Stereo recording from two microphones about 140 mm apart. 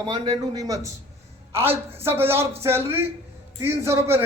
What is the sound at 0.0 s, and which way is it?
Speech, 30° right (ahead or behind).